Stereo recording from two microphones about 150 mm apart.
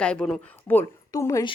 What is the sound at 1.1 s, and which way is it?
Speech, 20° left (ahead or behind).